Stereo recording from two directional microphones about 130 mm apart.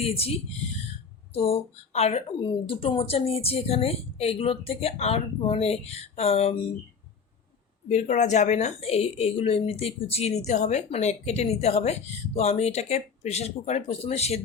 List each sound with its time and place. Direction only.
0.0 s speech: 50° left (ahead or behind)
2.4 s speech: 40° left (ahead or behind)
7.9 s a woman's voice: 70° left (ahead or behind)